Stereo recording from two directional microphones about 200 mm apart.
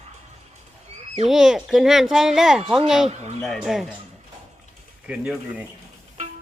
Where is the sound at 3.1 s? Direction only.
35° right (ahead or behind).